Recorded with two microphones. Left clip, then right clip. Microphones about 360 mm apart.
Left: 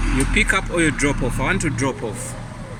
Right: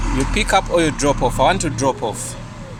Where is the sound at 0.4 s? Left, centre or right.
Right.